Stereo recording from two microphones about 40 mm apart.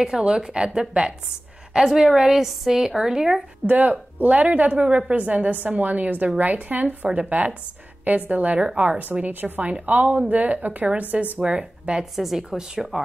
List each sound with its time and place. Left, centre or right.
0.2 s a woman's voice: centre
3.6 s speech: right
5.1 s speech: right
11.3 s speech: right
12.0 s a woman's voice: centre